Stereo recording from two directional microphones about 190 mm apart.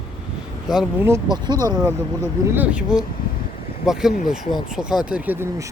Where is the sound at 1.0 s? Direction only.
20° right (ahead or behind).